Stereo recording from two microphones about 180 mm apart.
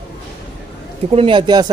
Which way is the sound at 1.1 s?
30° right (ahead or behind).